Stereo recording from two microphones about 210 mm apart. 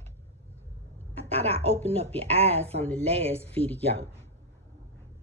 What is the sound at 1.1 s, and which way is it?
A woman's voice, 30° right (ahead or behind).